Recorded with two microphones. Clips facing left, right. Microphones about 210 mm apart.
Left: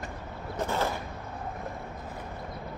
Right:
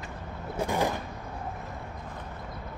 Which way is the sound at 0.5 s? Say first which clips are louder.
Right 2 dB; 15° right (ahead or behind).